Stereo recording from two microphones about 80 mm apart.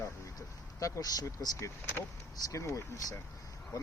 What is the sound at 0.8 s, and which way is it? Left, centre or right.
Speech, left.